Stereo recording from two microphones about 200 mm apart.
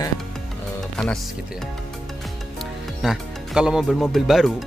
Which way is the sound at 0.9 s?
5° left (ahead or behind).